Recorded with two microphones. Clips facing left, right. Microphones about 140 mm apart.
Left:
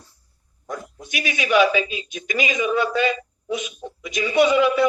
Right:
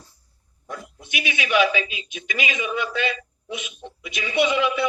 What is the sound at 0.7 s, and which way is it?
Speech, 40° left (ahead or behind).